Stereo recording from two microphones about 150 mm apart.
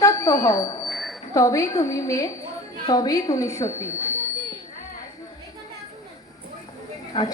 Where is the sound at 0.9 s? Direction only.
Centre (ahead or behind).